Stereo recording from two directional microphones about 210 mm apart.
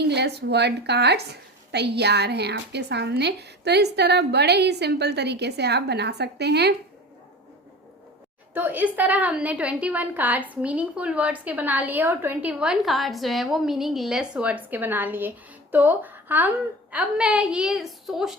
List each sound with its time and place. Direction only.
0.0 s a woman's voice: 50° right (ahead or behind)
8.5 s a woman's voice: 10° right (ahead or behind)